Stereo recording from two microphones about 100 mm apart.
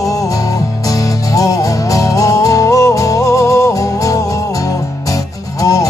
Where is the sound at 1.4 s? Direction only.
35° left (ahead or behind).